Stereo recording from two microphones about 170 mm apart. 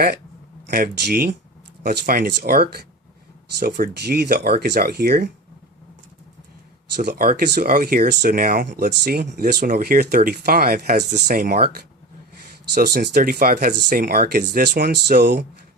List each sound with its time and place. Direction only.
0.7 s speech: 60° right (ahead or behind)
6.9 s speech: 70° right (ahead or behind)
9.2 s speech: 50° right (ahead or behind); by 15.4 s 75° right (ahead or behind)